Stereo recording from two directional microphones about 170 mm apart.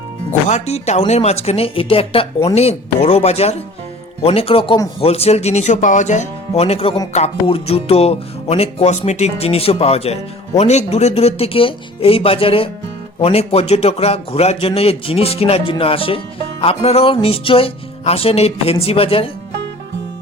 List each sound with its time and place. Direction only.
0.4 s a man's voice: 40° left (ahead or behind)